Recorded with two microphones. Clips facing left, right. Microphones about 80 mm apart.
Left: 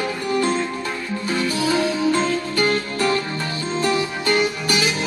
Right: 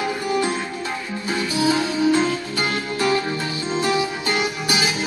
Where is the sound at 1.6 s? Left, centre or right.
Centre.